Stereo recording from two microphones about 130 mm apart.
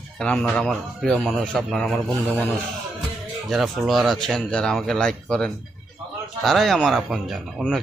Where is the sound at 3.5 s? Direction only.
Centre (ahead or behind).